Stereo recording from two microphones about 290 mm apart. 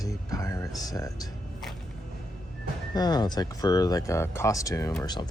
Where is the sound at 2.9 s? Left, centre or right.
Centre.